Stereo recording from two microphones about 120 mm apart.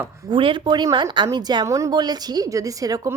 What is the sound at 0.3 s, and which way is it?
A woman's voice, 45° right (ahead or behind).